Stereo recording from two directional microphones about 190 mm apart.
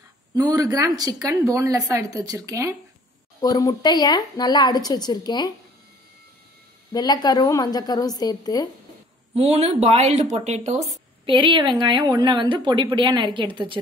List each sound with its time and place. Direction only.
0.3 s a woman's voice: 20° right (ahead or behind)
3.3 s speech: 20° left (ahead or behind)
6.9 s speech: 20° left (ahead or behind)
9.3 s speech: 30° right (ahead or behind)
11.2 s a woman's voice: 25° right (ahead or behind)